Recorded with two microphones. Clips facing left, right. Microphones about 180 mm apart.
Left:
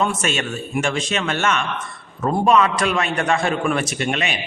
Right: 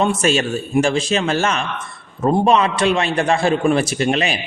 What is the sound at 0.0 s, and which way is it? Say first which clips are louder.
A man's voice: right 5 dB; 35° right (ahead or behind).